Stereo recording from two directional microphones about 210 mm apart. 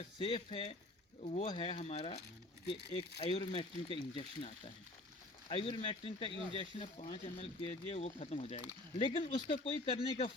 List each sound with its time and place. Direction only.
0.2 s speech: 25° left (ahead or behind)